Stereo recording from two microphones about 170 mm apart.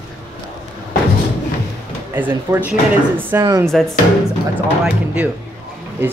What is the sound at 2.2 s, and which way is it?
Speech, 10° right (ahead or behind).